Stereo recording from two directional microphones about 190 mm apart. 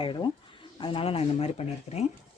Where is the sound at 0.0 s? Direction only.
25° left (ahead or behind).